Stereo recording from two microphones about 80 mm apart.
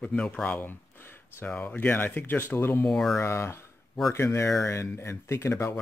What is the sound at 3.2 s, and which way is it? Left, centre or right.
Speech, left.